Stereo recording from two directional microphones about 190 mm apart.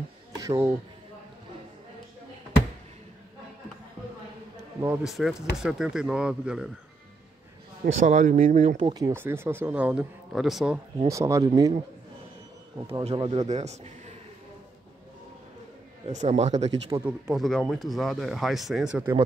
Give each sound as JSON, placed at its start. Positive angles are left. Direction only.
{"t": 0.4, "sound": "music", "side_deg": -15}
{"t": 4.8, "sound": "speech", "side_deg": -5}
{"t": 7.8, "sound": "speech", "side_deg": -40}
{"t": 8.6, "sound": "a man's voice", "side_deg": -25}
{"t": 11.1, "sound": "a man's voice", "side_deg": -15}
{"t": 12.8, "sound": "speech", "side_deg": -30}
{"t": 13.5, "sound": "a man's voice", "side_deg": -35}
{"t": 16.1, "sound": "a man's voice", "side_deg": -35}
{"t": 16.9, "sound": "a man's voice", "side_deg": -10}
{"t": 17.4, "sound": "speech", "side_deg": 0}